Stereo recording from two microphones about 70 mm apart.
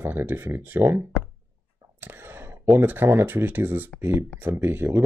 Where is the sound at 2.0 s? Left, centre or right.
Right.